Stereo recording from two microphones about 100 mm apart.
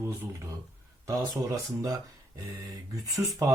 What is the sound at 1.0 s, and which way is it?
Speech, 30° right (ahead or behind).